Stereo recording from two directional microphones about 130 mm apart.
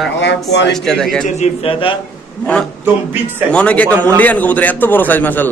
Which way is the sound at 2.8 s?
15° right (ahead or behind).